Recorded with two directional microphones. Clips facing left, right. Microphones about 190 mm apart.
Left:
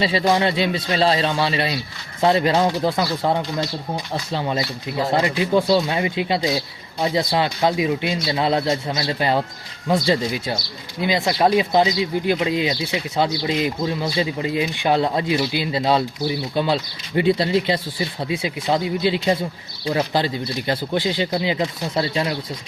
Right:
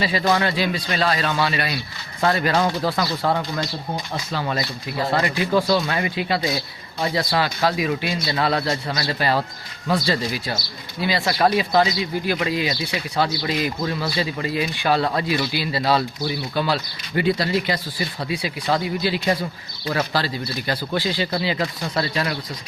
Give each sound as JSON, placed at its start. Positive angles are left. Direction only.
{"t": 0.0, "sound": "speech", "side_deg": 25}